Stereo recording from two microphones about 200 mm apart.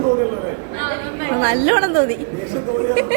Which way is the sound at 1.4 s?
50° right (ahead or behind).